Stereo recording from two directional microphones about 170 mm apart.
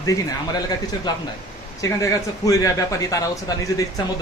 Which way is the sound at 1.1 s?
25° left (ahead or behind).